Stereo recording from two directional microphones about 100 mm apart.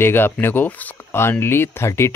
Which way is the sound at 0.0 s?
20° left (ahead or behind).